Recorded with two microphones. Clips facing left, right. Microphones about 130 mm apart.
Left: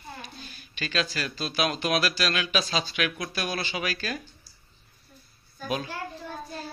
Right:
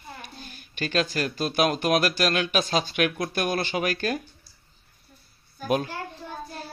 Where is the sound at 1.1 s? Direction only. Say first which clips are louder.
Right 5 dB; 50° right (ahead or behind).